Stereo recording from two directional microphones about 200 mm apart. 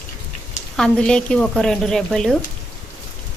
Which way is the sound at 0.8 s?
5° left (ahead or behind).